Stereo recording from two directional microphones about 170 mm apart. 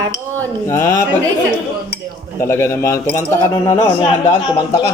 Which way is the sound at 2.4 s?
15° left (ahead or behind).